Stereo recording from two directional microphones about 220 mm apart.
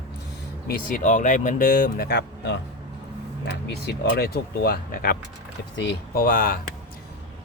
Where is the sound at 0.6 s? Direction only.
35° left (ahead or behind).